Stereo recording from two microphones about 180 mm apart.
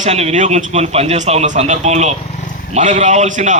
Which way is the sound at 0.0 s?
40° right (ahead or behind).